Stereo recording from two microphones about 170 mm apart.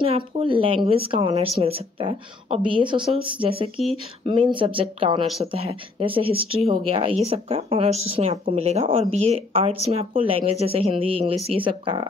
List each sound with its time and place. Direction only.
0.0 s speech: 30° right (ahead or behind)